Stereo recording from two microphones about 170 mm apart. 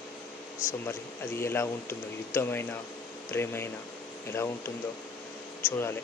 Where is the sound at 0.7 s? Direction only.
15° left (ahead or behind).